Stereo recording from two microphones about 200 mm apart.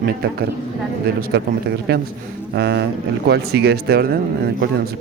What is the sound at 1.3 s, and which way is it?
Speech, 55° right (ahead or behind).